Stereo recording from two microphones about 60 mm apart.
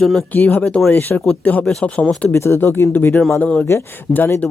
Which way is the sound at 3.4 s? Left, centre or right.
Left.